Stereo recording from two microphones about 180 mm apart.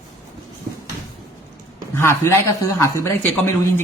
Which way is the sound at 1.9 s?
15° left (ahead or behind).